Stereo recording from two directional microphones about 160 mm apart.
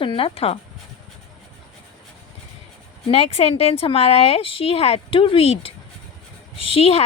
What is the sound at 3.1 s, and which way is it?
Speech, 40° left (ahead or behind).